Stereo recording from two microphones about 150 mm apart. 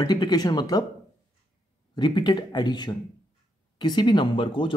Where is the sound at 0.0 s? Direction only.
25° left (ahead or behind).